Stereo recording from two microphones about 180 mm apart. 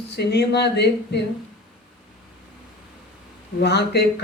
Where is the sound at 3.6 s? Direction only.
70° left (ahead or behind).